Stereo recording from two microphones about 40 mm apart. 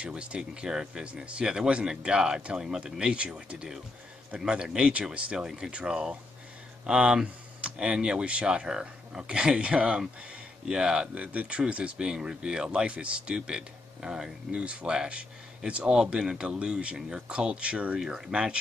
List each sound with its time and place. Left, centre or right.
0.0 s speech: right
0.7 s speech: centre
11.1 s speech: right
12.1 s speech: centre
14.6 s speech: right
18.0 s speech: centre